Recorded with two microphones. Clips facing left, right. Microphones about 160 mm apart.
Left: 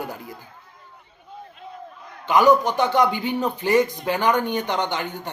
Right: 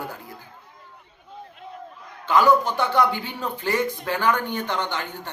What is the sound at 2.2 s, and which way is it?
Speech, 15° left (ahead or behind).